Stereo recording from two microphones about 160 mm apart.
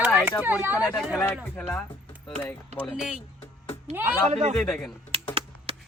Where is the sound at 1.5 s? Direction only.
10° left (ahead or behind).